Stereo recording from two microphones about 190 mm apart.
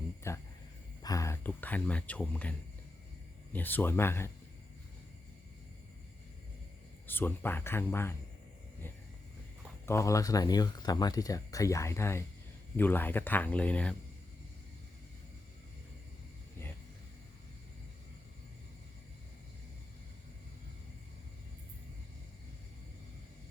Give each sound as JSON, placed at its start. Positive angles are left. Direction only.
{"t": 0.2, "sound": "a sound", "side_deg": 15}
{"t": 1.0, "sound": "speech", "side_deg": 15}
{"t": 7.1, "sound": "speech", "side_deg": 10}
{"t": 9.8, "sound": "speech", "side_deg": 15}